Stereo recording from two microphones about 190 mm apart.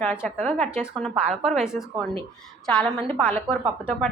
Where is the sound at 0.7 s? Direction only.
Centre (ahead or behind).